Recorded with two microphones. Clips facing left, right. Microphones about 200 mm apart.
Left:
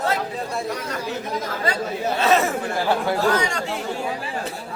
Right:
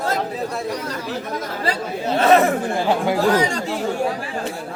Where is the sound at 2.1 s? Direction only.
55° right (ahead or behind).